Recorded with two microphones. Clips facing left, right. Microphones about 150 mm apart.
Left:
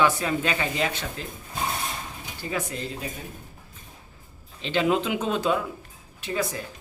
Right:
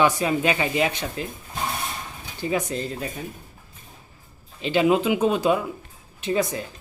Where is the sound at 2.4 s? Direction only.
20° right (ahead or behind).